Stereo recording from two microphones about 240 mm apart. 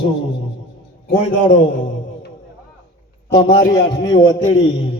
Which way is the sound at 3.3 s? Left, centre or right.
Left.